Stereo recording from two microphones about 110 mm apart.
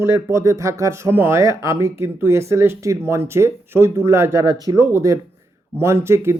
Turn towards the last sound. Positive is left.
turn(degrees=-25)  # may be behind; listen again after turning